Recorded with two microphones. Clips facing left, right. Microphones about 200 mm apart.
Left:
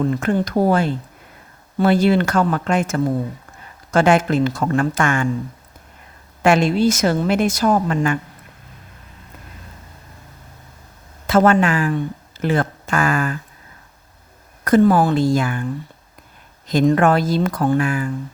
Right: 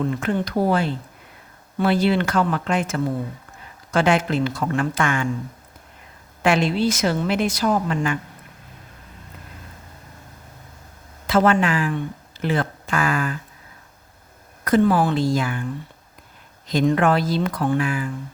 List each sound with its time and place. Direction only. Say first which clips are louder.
0.0 s a woman's voice: left 4 dB; 40° left (ahead or behind)
6.4 s a woman's voice: left 4 dB; 45° left (ahead or behind)
11.3 s speech: left 3 dB; 45° left (ahead or behind)
14.6 s a woman's voice: left 4 dB; 45° left (ahead or behind)
16.6 s a woman's voice: left 3 dB; 45° left (ahead or behind)